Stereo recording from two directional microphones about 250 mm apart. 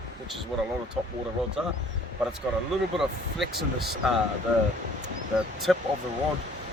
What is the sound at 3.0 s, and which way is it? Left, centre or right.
Speech, centre.